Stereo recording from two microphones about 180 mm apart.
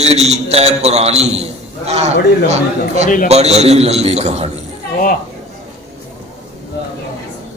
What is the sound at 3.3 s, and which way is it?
A man's voice, 35° right (ahead or behind).